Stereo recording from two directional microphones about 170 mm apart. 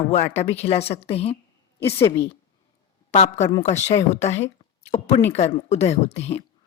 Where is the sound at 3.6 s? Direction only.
40° left (ahead or behind).